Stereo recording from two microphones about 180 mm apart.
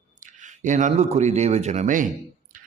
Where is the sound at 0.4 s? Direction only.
45° right (ahead or behind).